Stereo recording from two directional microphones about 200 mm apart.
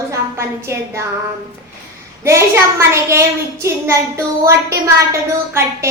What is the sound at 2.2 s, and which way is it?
A child's voice, 15° right (ahead or behind).